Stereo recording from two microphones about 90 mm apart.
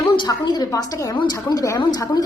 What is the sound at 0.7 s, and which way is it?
Speech, 40° left (ahead or behind).